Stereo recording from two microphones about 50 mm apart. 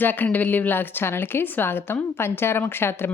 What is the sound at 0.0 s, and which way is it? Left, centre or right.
A woman's voice, left.